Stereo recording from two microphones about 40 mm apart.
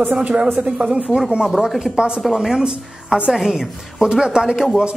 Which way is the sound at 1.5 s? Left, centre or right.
Centre.